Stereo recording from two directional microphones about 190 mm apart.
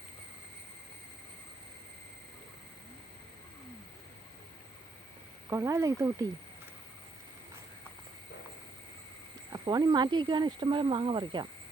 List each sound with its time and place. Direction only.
5.5 s speech: 15° right (ahead or behind)
9.5 s speech: 20° right (ahead or behind)